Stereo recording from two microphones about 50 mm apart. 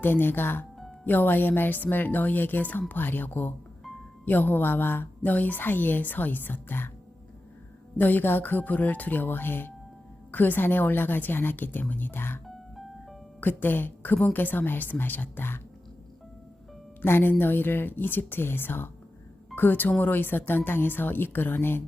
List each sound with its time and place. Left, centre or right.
0.0 s a woman's voice: left
7.9 s a woman's voice: left
12.5 s music: centre
13.4 s a woman's voice: left
17.0 s a woman's voice: left